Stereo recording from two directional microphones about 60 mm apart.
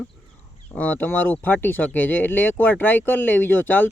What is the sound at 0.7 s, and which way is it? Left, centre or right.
Speech, left.